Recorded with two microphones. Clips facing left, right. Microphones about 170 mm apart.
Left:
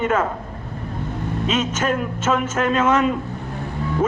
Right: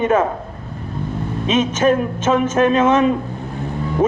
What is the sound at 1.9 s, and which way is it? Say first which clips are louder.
Speech: right 4 dB; 30° right (ahead or behind).